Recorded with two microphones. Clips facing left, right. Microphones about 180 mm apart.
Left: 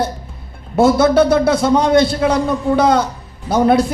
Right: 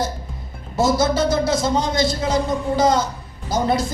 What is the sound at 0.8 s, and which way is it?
A man's voice, 60° left (ahead or behind).